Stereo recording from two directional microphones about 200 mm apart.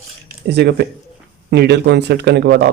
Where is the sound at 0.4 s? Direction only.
55° right (ahead or behind).